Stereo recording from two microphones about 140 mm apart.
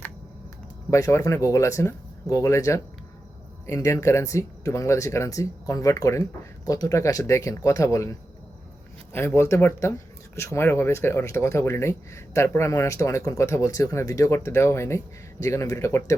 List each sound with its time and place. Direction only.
0.9 s speech: 20° left (ahead or behind)
9.1 s speech: 20° left (ahead or behind)